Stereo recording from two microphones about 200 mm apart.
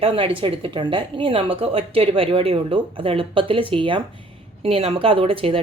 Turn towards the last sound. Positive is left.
turn(degrees=-25)  # may be behind; listen again after turning